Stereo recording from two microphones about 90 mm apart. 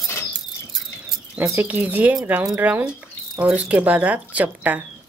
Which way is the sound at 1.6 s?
20° right (ahead or behind).